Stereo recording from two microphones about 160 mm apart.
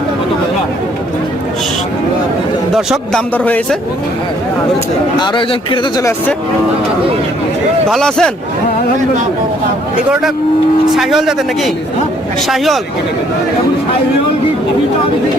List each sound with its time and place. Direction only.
2.7 s speech: centre (ahead or behind)
5.2 s speech: 30° left (ahead or behind)
7.9 s speech: 5° left (ahead or behind)
10.9 s speech: centre (ahead or behind)